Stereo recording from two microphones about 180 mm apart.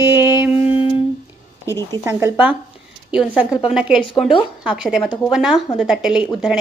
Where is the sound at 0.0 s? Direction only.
10° right (ahead or behind).